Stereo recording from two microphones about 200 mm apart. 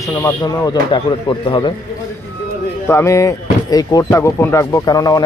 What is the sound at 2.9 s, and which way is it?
Speech, 15° left (ahead or behind).